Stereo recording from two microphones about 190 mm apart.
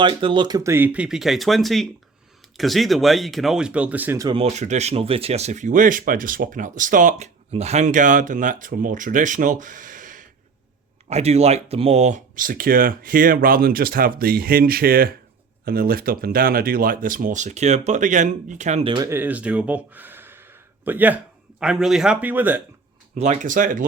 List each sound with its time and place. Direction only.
0.0 s speech: 25° right (ahead or behind)
4.4 s speech: 35° right (ahead or behind)
19.0 s speech: 10° right (ahead or behind)
23.1 s speech: 35° right (ahead or behind)